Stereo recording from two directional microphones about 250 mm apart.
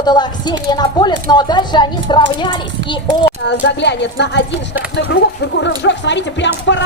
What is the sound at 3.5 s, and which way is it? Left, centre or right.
Speech, left.